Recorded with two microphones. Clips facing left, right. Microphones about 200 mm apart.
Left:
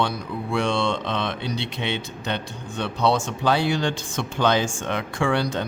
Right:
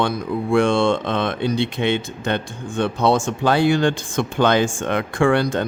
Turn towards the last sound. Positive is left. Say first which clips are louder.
# right 6 dB
turn(degrees=-50)  # may be behind; listen again after turning